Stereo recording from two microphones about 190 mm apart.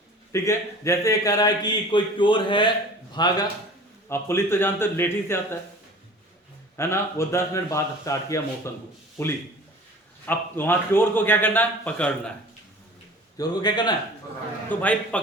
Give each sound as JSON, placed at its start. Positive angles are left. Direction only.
{"t": 0.3, "sound": "a man's voice", "side_deg": 15}
{"t": 6.7, "sound": "a man's voice", "side_deg": 15}
{"t": 10.2, "sound": "a man's voice", "side_deg": 10}
{"t": 13.3, "sound": "a man's voice", "side_deg": 20}
{"t": 14.8, "sound": "a man's voice", "side_deg": 10}